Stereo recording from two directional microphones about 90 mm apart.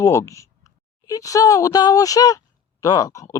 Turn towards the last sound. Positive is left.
turn(degrees=40)  # may be behind; listen again after turning